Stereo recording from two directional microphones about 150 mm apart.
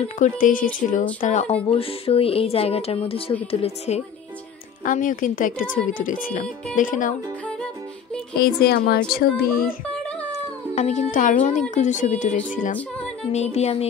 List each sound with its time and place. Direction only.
0.2 s speech: 65° left (ahead or behind)
1.2 s music: 50° left (ahead or behind)
1.7 s speech: 40° left (ahead or behind)
3.6 s music: 45° left (ahead or behind)
4.8 s speech: 60° left (ahead or behind)
8.4 s speech: 90° left
10.3 s speech: 55° left (ahead or behind)
13.3 s music: 45° left (ahead or behind)